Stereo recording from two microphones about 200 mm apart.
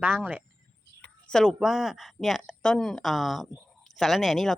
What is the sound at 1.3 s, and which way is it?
Speech, 5° left (ahead or behind).